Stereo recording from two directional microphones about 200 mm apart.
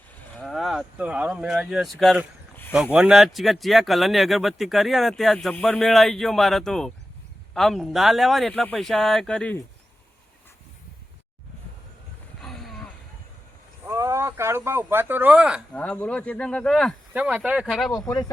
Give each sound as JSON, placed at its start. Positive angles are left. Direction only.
{"t": 0.3, "sound": "a sound", "side_deg": 0}
{"t": 2.7, "sound": "speech", "side_deg": -5}
{"t": 12.4, "sound": "a sound", "side_deg": 0}
{"t": 13.8, "sound": "speech", "side_deg": -15}
{"t": 15.7, "sound": "speech", "side_deg": 5}
{"t": 17.2, "sound": "speech", "side_deg": -5}
{"t": 17.9, "sound": "speech", "side_deg": 15}